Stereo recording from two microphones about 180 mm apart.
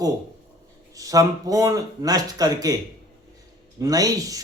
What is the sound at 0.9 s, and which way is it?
Speech, 20° right (ahead or behind).